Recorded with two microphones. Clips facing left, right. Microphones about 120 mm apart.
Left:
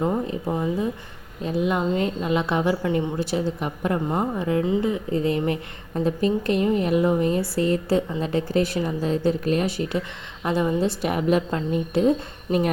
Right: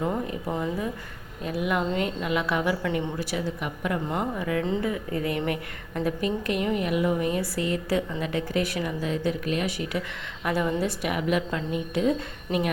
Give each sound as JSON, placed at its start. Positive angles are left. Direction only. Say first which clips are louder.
{"t": 0.0, "sound": "a woman's voice", "louder": "left 4 dB", "side_deg": 25}